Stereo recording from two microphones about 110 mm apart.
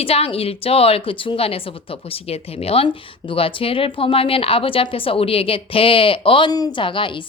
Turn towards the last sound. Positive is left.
turn(degrees=50)  # may be behind; listen again after turning